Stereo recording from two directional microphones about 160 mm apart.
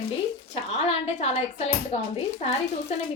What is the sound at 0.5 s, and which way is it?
A woman's voice, 40° left (ahead or behind).